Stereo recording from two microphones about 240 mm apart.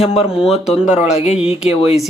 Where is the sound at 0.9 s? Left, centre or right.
Left.